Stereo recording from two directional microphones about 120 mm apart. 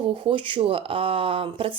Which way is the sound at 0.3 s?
45° right (ahead or behind).